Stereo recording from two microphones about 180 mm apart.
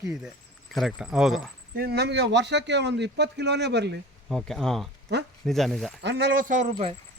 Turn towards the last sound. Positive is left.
turn(degrees=-35)  # may be behind; listen again after turning